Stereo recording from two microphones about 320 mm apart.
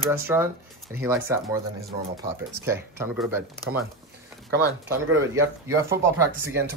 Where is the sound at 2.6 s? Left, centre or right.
Centre.